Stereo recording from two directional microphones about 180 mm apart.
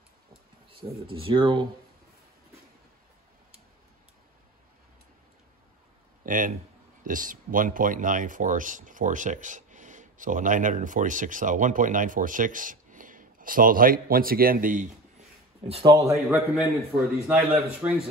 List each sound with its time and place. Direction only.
0.7 s a sound: 30° right (ahead or behind)
1.1 s speech: 30° right (ahead or behind)
6.2 s speech: 50° right (ahead or behind)
15.8 s a man's voice: 20° right (ahead or behind)
16.5 s a man's voice: centre (ahead or behind)